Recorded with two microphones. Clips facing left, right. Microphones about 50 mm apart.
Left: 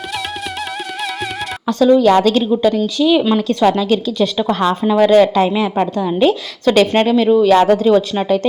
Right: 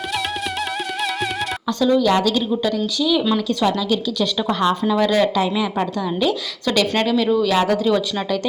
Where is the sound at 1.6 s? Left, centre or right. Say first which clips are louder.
Left 7 dB; left.